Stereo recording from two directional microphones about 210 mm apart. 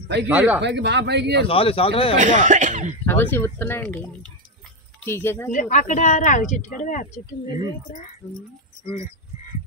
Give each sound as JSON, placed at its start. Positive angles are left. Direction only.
{"t": 0.3, "sound": "speech", "side_deg": -10}
{"t": 0.6, "sound": "speech", "side_deg": -55}
{"t": 1.5, "sound": "speech", "side_deg": 25}
{"t": 2.1, "sound": "speech", "side_deg": -35}
{"t": 3.1, "sound": "speech", "side_deg": 10}
{"t": 5.5, "sound": "speech", "side_deg": 35}